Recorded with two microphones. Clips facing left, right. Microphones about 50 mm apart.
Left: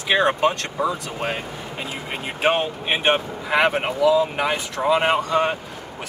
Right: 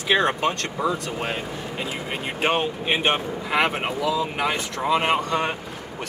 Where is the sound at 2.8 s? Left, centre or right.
Centre.